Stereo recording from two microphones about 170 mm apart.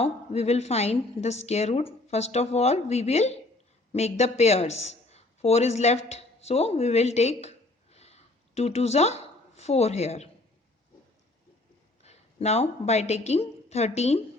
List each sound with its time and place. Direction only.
0.0 s a woman's voice: 40° left (ahead or behind)
12.0 s a woman's voice: 40° left (ahead or behind)